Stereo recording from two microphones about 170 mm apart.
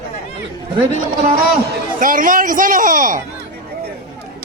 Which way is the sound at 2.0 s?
55° right (ahead or behind).